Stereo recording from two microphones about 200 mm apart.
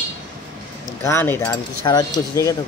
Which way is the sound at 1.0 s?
10° left (ahead or behind).